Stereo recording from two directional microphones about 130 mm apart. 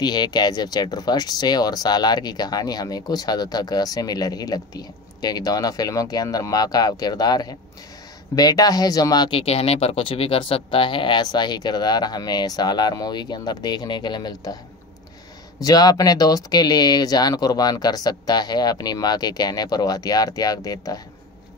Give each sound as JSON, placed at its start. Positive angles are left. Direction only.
{"t": 0.0, "sound": "speech", "side_deg": 35}
{"t": 9.4, "sound": "speech", "side_deg": 50}
{"t": 15.6, "sound": "speech", "side_deg": 30}